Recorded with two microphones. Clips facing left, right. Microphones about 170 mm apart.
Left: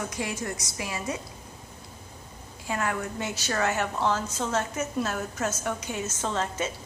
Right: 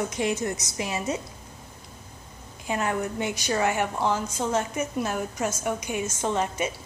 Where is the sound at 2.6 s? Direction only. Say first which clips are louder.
Right 3 dB; 20° right (ahead or behind).